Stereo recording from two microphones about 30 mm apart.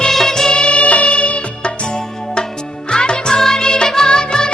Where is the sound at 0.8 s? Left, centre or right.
Left.